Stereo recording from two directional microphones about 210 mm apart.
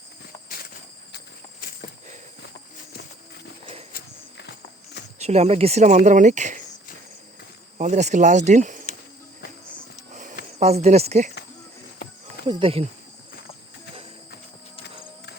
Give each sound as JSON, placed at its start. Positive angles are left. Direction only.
{"t": 3.9, "sound": "walk", "side_deg": 55}
{"t": 5.2, "sound": "speech", "side_deg": -30}
{"t": 7.8, "sound": "speech", "side_deg": -35}
{"t": 10.6, "sound": "speech", "side_deg": -30}
{"t": 12.5, "sound": "speech", "side_deg": -25}